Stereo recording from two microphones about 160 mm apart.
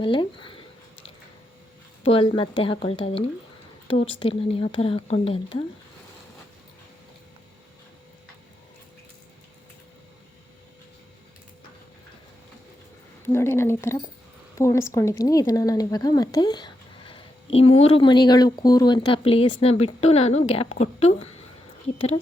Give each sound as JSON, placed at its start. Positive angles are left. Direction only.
{"t": 0.0, "sound": "speech", "side_deg": 30}
{"t": 2.0, "sound": "speech", "side_deg": 35}
{"t": 13.2, "sound": "a woman's voice", "side_deg": 15}